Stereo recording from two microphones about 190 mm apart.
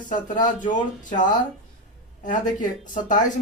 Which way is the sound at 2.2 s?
40° left (ahead or behind).